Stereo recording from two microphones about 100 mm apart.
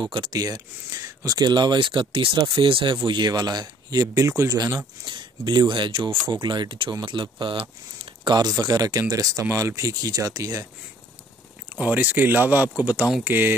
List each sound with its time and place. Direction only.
0.3 s speech: 40° right (ahead or behind); by 3.0 s 60° right (ahead or behind)
3.1 s speech: 45° right (ahead or behind)
5.0 s speech: 50° right (ahead or behind)
6.3 s speech: 45° right (ahead or behind)
8.3 s speech: 45° right (ahead or behind)
11.7 s speech: 15° right (ahead or behind)